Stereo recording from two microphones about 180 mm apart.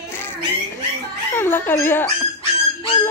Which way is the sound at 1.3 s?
10° left (ahead or behind).